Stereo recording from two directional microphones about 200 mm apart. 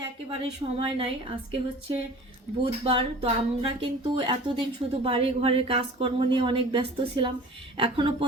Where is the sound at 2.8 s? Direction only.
25° right (ahead or behind).